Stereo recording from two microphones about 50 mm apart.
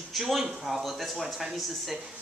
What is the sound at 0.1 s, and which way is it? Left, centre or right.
Speech, centre.